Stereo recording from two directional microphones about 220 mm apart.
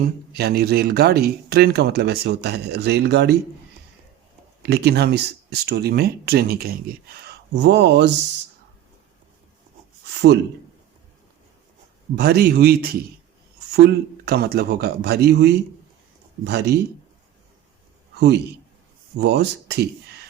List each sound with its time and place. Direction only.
0.3 s speech: 45° right (ahead or behind)
4.6 s speech: 50° right (ahead or behind)
10.2 s speech: 50° right (ahead or behind)
12.1 s speech: 45° right (ahead or behind)
19.1 s speech: 50° right (ahead or behind)